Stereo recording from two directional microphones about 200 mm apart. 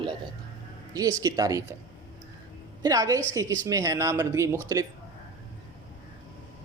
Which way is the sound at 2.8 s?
15° right (ahead or behind).